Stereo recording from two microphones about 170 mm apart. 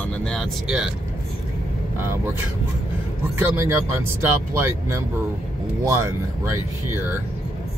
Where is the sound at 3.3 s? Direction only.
15° right (ahead or behind).